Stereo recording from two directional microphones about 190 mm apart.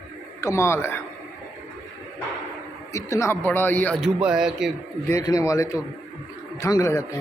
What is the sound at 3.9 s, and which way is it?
Speech, 5° right (ahead or behind).